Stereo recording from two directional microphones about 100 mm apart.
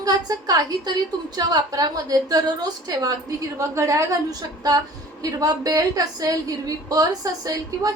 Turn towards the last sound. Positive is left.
turn(degrees=-40)  # may be behind; listen again after turning